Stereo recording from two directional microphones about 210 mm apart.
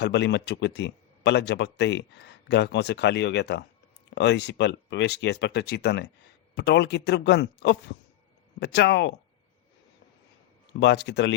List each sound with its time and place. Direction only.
0.0 s speech: 55° left (ahead or behind)
10.8 s speech: 55° left (ahead or behind)